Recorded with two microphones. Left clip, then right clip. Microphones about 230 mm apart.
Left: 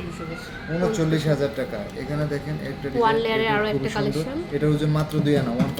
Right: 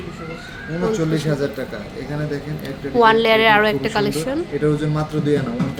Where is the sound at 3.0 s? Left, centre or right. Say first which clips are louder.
Right 8 dB; right.